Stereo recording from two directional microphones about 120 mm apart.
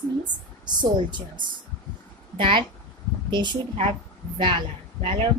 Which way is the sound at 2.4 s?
45° right (ahead or behind).